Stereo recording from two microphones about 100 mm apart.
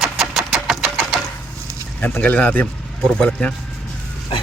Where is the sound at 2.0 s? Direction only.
15° left (ahead or behind).